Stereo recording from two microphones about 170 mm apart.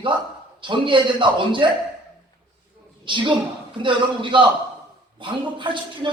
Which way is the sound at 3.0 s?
30° right (ahead or behind).